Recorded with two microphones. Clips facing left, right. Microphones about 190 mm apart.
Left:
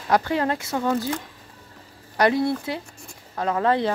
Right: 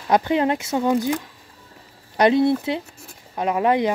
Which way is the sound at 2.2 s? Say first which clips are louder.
Right 4 dB; 20° right (ahead or behind).